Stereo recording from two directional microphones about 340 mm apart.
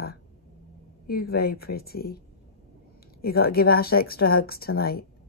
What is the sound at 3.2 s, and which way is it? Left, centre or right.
Speech, left.